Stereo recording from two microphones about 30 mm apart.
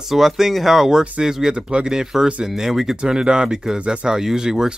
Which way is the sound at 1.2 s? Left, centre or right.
Centre.